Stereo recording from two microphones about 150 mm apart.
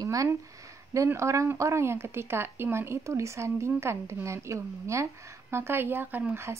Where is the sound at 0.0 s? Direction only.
20° right (ahead or behind).